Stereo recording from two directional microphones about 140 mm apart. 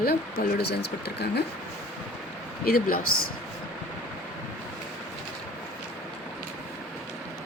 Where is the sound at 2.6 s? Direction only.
90° left.